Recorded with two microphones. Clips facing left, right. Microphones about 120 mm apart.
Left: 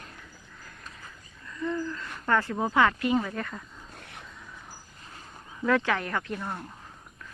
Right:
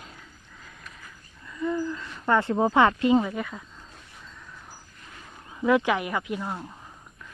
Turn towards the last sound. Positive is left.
turn(degrees=-10)  # may be behind; listen again after turning